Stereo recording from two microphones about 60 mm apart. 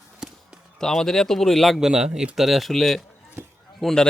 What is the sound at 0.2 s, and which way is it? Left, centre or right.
Basketball bounce, centre.